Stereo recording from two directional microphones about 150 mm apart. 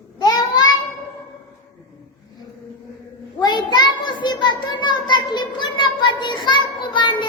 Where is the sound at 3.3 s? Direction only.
30° left (ahead or behind).